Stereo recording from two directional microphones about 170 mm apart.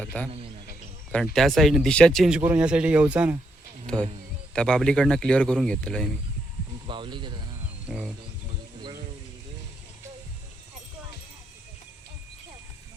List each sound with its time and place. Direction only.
0.0 s a man's voice: 5° left (ahead or behind); by 3.3 s 10° right (ahead or behind)
3.9 s speech: 5° left (ahead or behind)
6.8 s speech: 30° right (ahead or behind)